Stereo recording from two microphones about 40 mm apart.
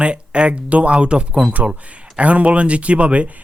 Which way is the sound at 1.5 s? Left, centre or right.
Right.